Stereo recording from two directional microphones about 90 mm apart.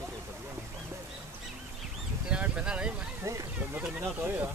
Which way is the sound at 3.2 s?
35° right (ahead or behind).